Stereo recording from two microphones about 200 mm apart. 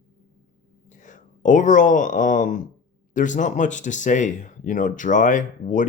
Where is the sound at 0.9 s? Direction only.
40° left (ahead or behind).